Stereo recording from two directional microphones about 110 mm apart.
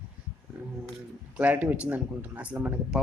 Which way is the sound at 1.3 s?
15° right (ahead or behind).